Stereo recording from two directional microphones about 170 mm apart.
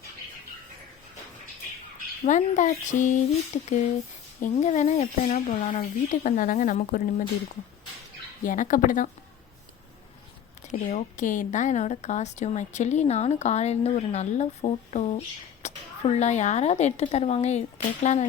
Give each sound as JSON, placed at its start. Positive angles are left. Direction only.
{"t": 2.0, "sound": "speech", "side_deg": 45}
{"t": 8.4, "sound": "speech", "side_deg": 50}
{"t": 10.7, "sound": "a woman's voice", "side_deg": 45}